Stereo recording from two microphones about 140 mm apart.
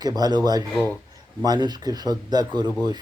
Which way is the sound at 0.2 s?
30° right (ahead or behind).